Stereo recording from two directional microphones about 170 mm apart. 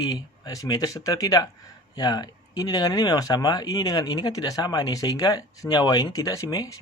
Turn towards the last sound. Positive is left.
turn(degrees=20)  # may be behind; listen again after turning